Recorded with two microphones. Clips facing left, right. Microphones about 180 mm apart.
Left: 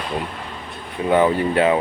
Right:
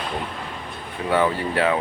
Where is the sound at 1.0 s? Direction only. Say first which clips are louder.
Left 4 dB; 20° left (ahead or behind).